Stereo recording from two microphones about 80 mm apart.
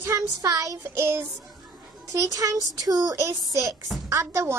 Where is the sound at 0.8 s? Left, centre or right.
Right.